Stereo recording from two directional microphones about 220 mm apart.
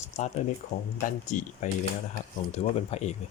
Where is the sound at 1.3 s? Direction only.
35° left (ahead or behind).